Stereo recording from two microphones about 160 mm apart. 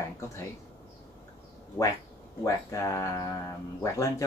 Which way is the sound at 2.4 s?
20° left (ahead or behind).